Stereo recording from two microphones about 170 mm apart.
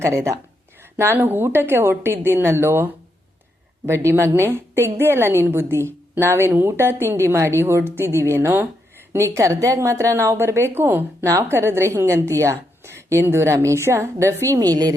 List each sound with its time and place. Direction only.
0.0 s a woman's voice: 15° right (ahead or behind)